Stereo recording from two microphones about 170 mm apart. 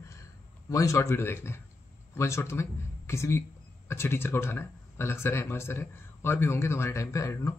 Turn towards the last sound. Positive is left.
turn(degrees=15)  # may be behind; listen again after turning